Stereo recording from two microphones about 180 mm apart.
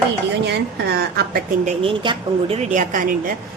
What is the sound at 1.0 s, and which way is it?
Speech, 60° right (ahead or behind).